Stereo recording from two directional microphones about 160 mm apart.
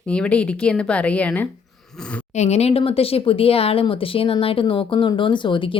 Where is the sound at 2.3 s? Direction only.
45° left (ahead or behind).